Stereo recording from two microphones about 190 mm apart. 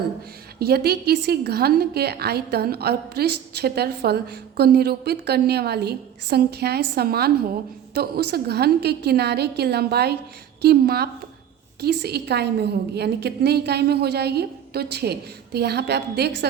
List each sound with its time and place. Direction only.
0.6 s a woman's voice: 55° right (ahead or behind)